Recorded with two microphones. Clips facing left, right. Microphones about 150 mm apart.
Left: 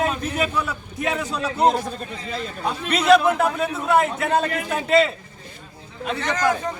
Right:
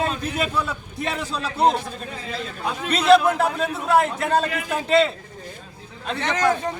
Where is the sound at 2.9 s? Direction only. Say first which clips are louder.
Even; 5° left (ahead or behind).